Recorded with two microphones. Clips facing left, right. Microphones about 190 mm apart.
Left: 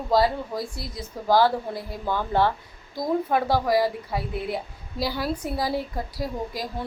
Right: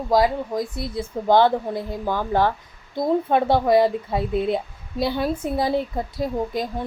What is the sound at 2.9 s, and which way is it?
A woman's voice, 25° right (ahead or behind).